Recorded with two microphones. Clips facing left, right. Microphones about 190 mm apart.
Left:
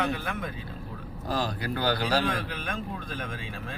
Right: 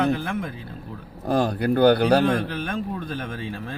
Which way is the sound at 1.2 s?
55° right (ahead or behind).